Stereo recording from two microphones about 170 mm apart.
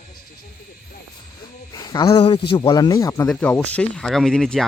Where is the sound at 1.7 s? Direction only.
20° left (ahead or behind).